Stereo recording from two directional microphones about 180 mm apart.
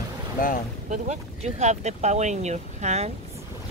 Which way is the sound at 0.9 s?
40° right (ahead or behind).